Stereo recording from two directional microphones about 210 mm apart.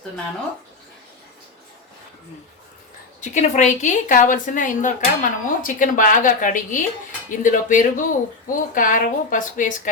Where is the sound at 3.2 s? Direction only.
35° left (ahead or behind).